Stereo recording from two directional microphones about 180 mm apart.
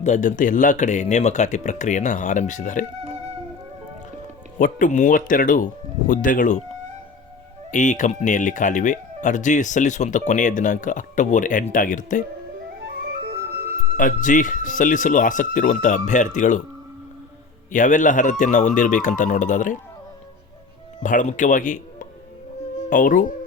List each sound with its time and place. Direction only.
0.0 s speech: 45° left (ahead or behind)
4.5 s speech: 50° left (ahead or behind)
7.7 s speech: 45° left (ahead or behind)
12.8 s music: 65° right (ahead or behind)
13.9 s speech: 45° left (ahead or behind)
17.7 s speech: 45° left (ahead or behind)
21.0 s speech: 45° left (ahead or behind)